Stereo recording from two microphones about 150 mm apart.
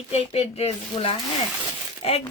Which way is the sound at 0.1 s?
45° left (ahead or behind).